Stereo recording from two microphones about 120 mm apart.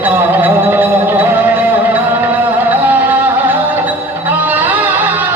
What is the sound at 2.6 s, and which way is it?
Music, 15° right (ahead or behind).